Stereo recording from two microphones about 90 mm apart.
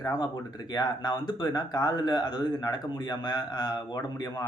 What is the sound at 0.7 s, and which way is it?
Speech, 50° left (ahead or behind).